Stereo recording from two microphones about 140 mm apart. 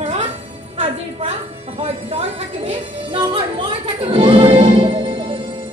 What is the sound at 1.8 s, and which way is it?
Music, 50° right (ahead or behind).